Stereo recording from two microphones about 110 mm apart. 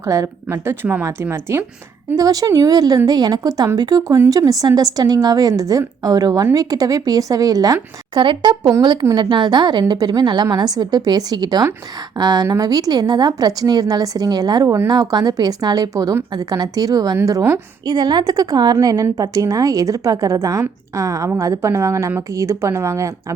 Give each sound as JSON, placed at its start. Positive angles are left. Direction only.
{"t": 0.0, "sound": "a woman's voice", "side_deg": -30}
{"t": 8.2, "sound": "a woman's voice", "side_deg": -45}